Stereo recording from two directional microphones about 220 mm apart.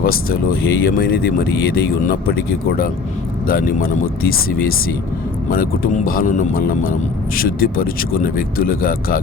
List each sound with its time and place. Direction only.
0.0 s speech: 40° left (ahead or behind)